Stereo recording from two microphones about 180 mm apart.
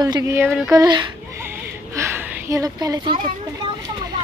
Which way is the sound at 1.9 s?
15° right (ahead or behind).